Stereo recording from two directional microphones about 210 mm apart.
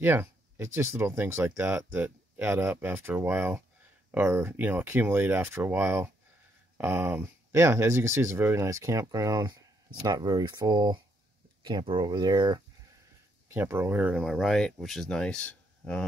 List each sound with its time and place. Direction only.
0.0 s speech: 10° right (ahead or behind); by 16.0 s 5° left (ahead or behind)